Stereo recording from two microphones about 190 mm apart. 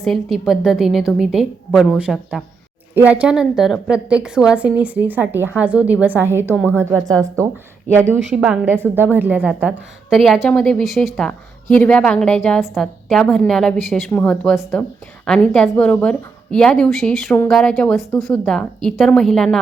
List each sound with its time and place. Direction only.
0.0 s a woman's voice: centre (ahead or behind); by 7.4 s 20° right (ahead or behind)
8.1 s a woman's voice: centre (ahead or behind)